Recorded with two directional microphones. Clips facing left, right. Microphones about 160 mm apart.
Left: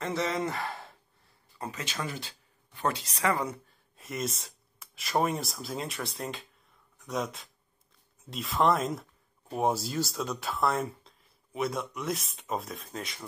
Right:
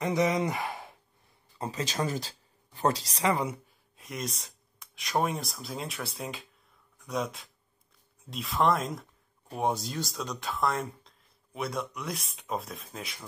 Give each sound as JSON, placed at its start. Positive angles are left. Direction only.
{"t": 0.0, "sound": "speech", "side_deg": -15}
{"t": 1.6, "sound": "speech", "side_deg": -35}
{"t": 3.4, "sound": "speech", "side_deg": 0}